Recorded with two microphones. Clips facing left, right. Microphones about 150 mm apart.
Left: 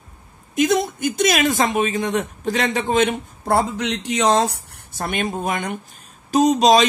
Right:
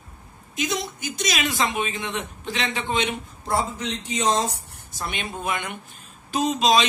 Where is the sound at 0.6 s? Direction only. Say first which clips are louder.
Left 10 dB; 50° left (ahead or behind).